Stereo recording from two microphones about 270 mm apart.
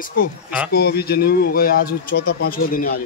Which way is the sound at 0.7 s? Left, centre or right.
Left.